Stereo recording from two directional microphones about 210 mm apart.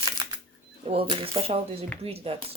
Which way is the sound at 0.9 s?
25° right (ahead or behind).